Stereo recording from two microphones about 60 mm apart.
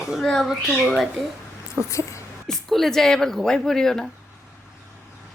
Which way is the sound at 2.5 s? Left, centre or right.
Centre.